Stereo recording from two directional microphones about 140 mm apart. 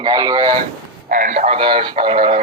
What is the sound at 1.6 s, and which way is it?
Speech, 35° right (ahead or behind).